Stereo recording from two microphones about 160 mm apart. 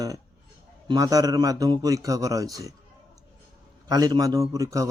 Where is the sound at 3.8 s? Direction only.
25° right (ahead or behind).